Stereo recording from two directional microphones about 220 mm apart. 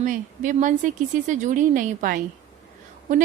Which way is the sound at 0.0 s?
35° right (ahead or behind).